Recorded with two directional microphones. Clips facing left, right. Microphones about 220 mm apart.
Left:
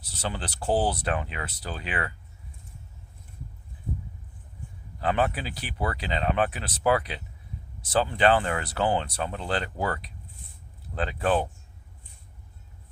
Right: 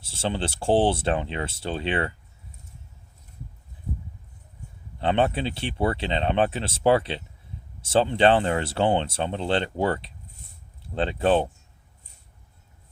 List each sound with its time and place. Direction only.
0.0 s speech: 25° right (ahead or behind)
4.9 s speech: 30° right (ahead or behind)